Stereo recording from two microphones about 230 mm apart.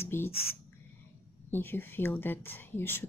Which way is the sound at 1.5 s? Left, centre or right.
Centre.